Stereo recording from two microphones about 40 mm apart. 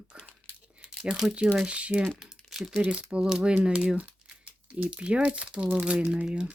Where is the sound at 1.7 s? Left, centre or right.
Right.